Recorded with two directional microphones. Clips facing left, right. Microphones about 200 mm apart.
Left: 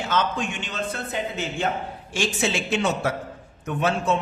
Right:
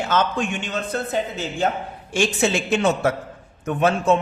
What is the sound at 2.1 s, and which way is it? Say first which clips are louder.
A man's voice: right 5 dB; 50° right (ahead or behind).